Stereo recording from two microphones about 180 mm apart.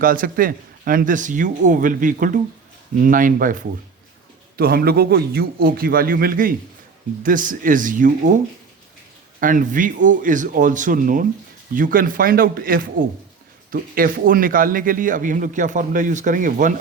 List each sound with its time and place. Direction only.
0.0 s a man's voice: 50° right (ahead or behind)
9.4 s speech: 50° right (ahead or behind)